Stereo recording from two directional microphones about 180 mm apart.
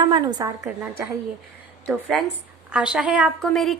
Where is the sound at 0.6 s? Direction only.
10° right (ahead or behind).